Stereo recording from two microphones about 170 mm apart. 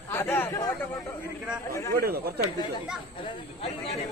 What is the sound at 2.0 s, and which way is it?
Speech, 65° right (ahead or behind).